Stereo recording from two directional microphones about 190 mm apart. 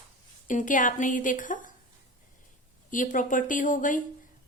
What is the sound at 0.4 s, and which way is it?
A woman's voice, 45° left (ahead or behind).